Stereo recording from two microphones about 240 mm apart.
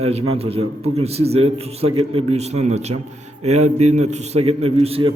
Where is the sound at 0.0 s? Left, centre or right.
Right.